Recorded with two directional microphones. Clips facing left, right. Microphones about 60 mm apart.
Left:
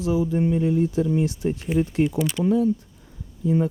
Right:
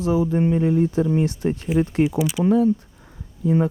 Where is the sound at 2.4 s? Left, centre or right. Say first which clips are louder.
Right 3 dB; right.